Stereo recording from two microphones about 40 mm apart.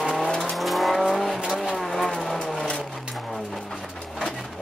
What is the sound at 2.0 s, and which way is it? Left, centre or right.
Vehicle, centre.